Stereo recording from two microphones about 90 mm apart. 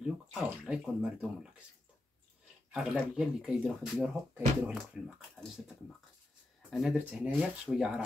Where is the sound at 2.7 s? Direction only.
10° right (ahead or behind).